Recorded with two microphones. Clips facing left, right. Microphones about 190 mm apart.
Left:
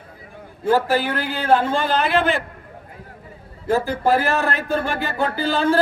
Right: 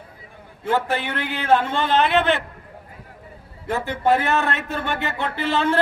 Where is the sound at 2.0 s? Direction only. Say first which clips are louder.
Right 3 dB; centre (ahead or behind).